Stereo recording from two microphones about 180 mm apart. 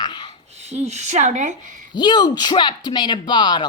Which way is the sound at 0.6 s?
40° right (ahead or behind).